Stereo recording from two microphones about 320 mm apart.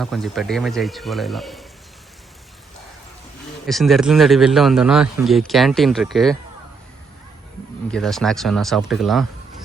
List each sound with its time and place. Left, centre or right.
0.0 s speech: centre
3.7 s speech: centre
7.9 s speech: centre